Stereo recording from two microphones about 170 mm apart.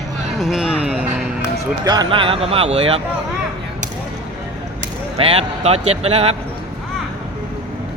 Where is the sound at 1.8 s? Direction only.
25° right (ahead or behind).